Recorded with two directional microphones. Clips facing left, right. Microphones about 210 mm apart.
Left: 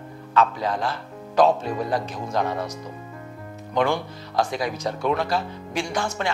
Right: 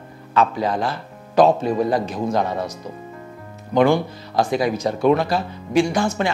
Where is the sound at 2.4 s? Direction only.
25° right (ahead or behind).